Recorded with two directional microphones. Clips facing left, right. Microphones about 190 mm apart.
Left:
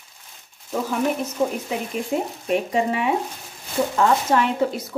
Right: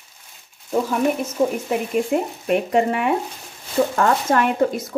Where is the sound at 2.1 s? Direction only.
60° right (ahead or behind).